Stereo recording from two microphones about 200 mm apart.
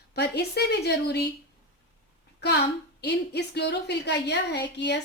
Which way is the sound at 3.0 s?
55° left (ahead or behind).